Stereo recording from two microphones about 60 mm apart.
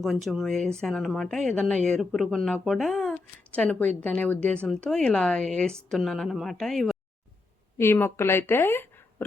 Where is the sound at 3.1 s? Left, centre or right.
Centre.